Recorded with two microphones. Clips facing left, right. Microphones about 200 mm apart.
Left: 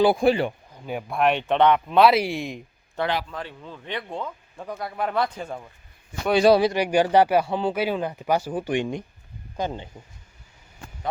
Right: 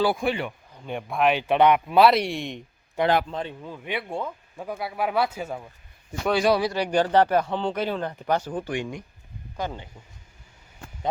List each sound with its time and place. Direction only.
0.0 s speech: 30° left (ahead or behind)
0.9 s speech: centre (ahead or behind)
3.0 s speech: 15° right (ahead or behind)
6.3 s a man's voice: 30° left (ahead or behind)
6.7 s speech: 10° left (ahead or behind)
8.7 s a man's voice: 25° left (ahead or behind)